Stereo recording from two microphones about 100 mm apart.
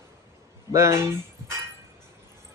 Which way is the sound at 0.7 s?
30° right (ahead or behind).